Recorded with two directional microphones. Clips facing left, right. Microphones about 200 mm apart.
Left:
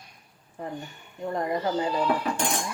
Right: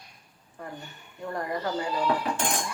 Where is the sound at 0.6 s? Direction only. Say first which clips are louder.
Left 5 dB; 20° left (ahead or behind).